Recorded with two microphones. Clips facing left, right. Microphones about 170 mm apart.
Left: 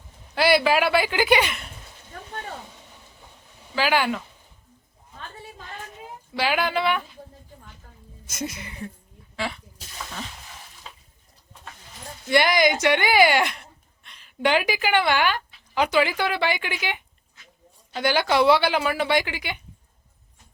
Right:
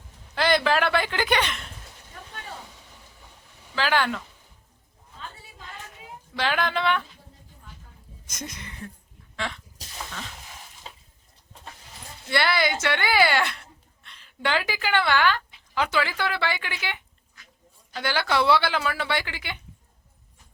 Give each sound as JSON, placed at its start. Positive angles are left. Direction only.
{"t": 0.3, "sound": "speech", "side_deg": 10}
{"t": 3.8, "sound": "a woman's voice", "side_deg": 10}
{"t": 6.3, "sound": "a woman's voice", "side_deg": 10}
{"t": 8.3, "sound": "a woman's voice", "side_deg": 10}
{"t": 9.3, "sound": "sneeze", "side_deg": 10}
{"t": 10.8, "sound": "water", "side_deg": -25}
{"t": 12.3, "sound": "a woman's voice", "side_deg": 15}